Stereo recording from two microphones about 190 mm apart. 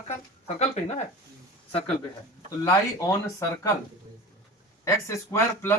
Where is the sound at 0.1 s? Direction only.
35° left (ahead or behind).